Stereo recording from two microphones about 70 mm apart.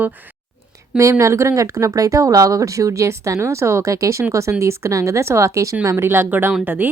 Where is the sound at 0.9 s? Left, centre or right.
Right.